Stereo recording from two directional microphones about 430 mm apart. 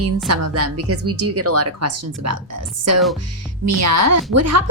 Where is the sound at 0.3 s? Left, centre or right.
Right.